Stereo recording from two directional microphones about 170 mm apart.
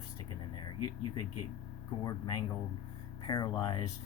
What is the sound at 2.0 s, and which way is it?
Speech, 25° left (ahead or behind).